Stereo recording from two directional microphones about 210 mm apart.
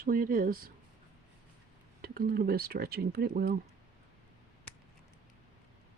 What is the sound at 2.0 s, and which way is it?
Speech, 45° right (ahead or behind).